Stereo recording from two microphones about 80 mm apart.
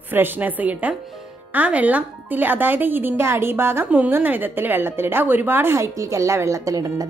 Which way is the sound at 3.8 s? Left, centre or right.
Centre.